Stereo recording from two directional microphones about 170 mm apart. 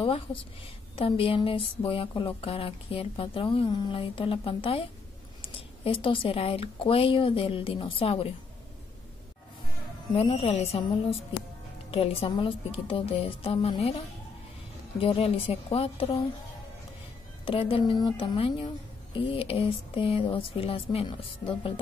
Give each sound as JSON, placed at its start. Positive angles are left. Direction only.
{"t": 0.0, "sound": "speech", "side_deg": 30}
{"t": 10.1, "sound": "speech", "side_deg": 35}
{"t": 17.5, "sound": "speech", "side_deg": 35}